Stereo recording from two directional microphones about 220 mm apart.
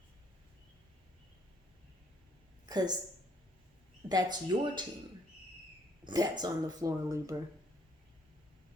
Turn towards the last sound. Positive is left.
turn(degrees=-15)  # may be behind; listen again after turning